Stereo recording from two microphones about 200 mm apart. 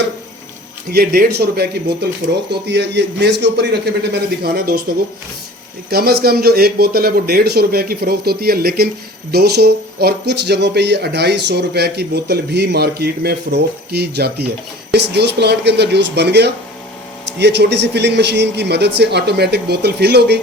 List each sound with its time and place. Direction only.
0.9 s speech: 50° right (ahead or behind)
5.9 s a man's voice: 50° right (ahead or behind)